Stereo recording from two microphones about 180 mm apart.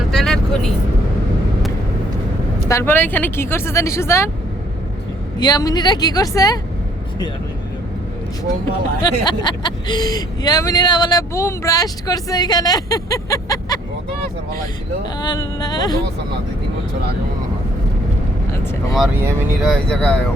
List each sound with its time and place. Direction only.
0.1 s vehicle: centre (ahead or behind)
2.6 s speech: 15° left (ahead or behind)
5.4 s speech: 20° left (ahead or behind)
9.0 s speech: 25° left (ahead or behind)
19.6 s speech: 5° left (ahead or behind)